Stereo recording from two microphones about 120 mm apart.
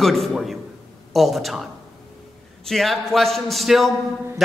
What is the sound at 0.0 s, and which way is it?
A man's voice, centre (ahead or behind).